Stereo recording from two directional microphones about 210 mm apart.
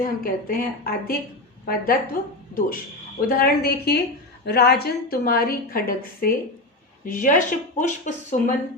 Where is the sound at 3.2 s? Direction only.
45° left (ahead or behind).